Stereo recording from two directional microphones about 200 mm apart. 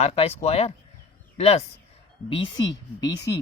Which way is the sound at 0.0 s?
30° left (ahead or behind).